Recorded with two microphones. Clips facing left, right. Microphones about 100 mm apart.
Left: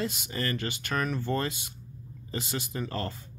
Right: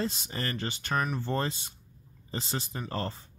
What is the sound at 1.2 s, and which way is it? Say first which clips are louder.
Speech: left 1 dB; 30° right (ahead or behind).